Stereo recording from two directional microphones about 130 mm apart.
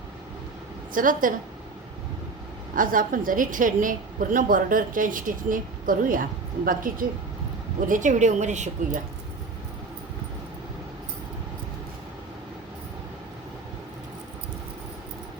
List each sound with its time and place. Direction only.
0.9 s a woman's voice: 90° right
2.7 s a woman's voice: 90° right
7.9 s a woman's voice: 75° right (ahead or behind)